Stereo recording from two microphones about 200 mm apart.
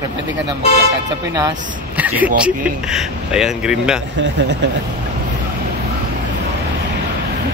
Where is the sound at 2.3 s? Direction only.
5° right (ahead or behind).